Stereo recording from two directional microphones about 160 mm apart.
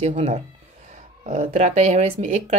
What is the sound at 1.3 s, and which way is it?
Speech, 50° right (ahead or behind).